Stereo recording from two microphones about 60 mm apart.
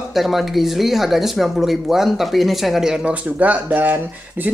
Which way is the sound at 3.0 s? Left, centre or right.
Right.